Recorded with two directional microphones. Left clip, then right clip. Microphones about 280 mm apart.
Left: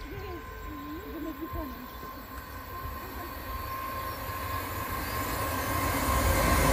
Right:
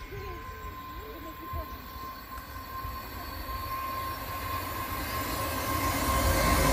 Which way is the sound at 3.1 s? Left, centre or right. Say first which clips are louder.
Even; right.